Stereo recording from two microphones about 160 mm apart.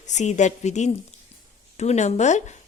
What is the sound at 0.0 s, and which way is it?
Speech, 45° left (ahead or behind).